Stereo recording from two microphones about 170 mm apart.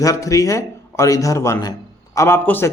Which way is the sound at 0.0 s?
20° left (ahead or behind).